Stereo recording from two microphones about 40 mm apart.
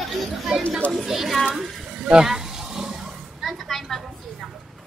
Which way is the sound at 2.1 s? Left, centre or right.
Centre.